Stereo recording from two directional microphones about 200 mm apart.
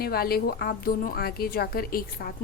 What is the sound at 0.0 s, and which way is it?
A woman's voice, 50° left (ahead or behind).